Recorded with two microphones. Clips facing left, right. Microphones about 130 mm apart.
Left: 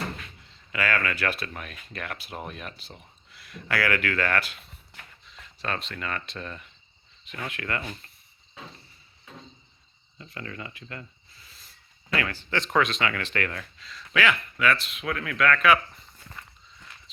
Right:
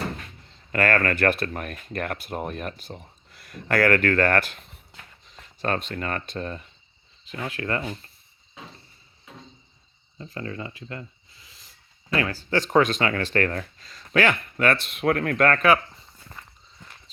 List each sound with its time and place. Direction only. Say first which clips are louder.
0.2 s speech: right 2 dB; 50° right (ahead or behind); by 7.9 s 30° right (ahead or behind)
10.2 s a sound: right 5 dB; 30° right (ahead or behind); by 11.7 s 15° right (ahead or behind)
12.1 s speech: right 4 dB; 30° right (ahead or behind)